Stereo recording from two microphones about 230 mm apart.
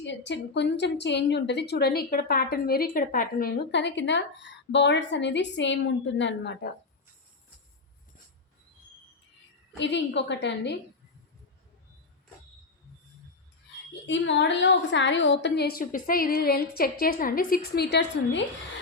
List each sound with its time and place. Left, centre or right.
0.0 s a woman's voice: left
9.7 s a woman's voice: left
14.1 s a woman's voice: left